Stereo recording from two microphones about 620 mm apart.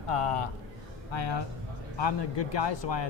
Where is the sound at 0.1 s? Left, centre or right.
Left.